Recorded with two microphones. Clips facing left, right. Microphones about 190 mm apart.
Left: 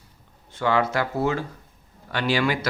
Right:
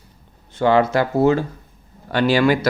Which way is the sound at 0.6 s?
30° right (ahead or behind).